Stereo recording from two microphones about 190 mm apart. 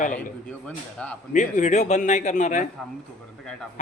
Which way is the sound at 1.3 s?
40° left (ahead or behind).